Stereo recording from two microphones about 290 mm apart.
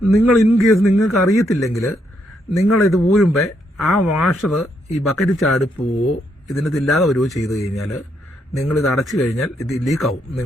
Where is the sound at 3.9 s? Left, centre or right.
Left.